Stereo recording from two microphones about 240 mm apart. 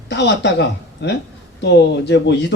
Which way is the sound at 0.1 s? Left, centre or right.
Left.